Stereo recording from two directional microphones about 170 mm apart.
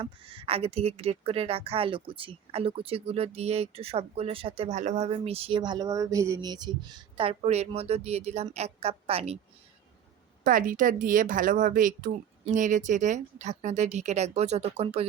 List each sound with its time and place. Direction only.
0.0 s speech: 30° right (ahead or behind)
10.4 s speech: 55° right (ahead or behind); by 15.0 s 40° right (ahead or behind)